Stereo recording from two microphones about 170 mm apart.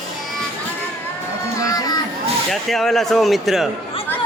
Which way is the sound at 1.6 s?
20° left (ahead or behind).